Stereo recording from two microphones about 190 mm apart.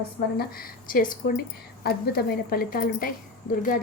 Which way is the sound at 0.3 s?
50° left (ahead or behind).